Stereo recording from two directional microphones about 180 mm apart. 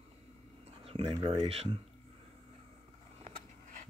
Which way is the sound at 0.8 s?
30° right (ahead or behind).